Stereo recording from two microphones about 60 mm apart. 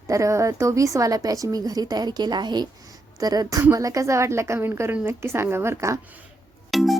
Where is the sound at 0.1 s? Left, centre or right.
Right.